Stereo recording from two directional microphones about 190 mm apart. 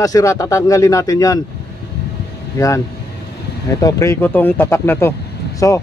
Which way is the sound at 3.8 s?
15° left (ahead or behind).